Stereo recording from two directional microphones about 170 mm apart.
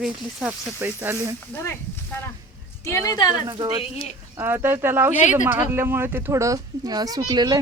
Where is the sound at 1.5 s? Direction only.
15° left (ahead or behind).